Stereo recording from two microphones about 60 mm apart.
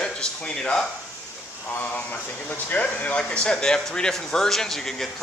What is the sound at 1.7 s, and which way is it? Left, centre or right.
Speech, left.